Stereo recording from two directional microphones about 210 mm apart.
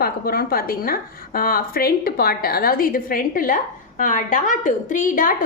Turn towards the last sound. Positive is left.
turn(degrees=40)  # may be behind; listen again after turning